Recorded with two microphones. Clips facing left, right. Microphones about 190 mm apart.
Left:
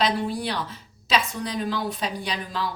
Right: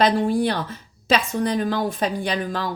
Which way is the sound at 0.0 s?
50° right (ahead or behind).